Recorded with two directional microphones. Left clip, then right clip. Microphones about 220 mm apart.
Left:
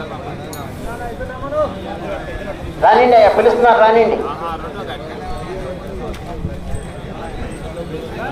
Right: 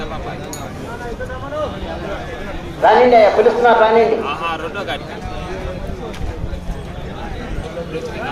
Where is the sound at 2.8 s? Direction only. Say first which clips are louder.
Left 1 dB; 30° left (ahead or behind).